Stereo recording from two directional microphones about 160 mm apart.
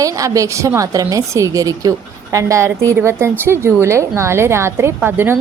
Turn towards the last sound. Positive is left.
turn(degrees=-15)  # may be behind; listen again after turning